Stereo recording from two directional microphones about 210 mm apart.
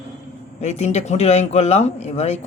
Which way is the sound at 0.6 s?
30° left (ahead or behind).